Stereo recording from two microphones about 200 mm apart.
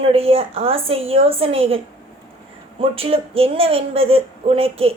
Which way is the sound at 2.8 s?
30° right (ahead or behind).